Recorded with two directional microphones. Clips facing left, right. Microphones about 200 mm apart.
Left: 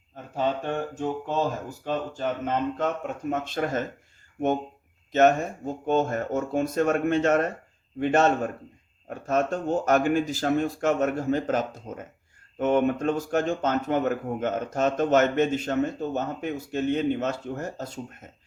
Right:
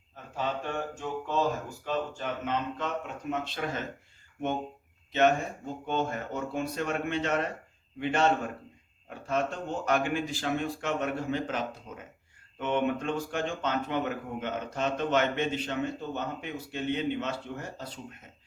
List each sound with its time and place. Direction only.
0.3 s mantra: 40° left (ahead or behind)
1.8 s speech: 40° left (ahead or behind)
5.1 s speech: 45° left (ahead or behind)